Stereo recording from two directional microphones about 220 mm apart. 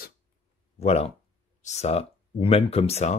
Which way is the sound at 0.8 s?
30° left (ahead or behind).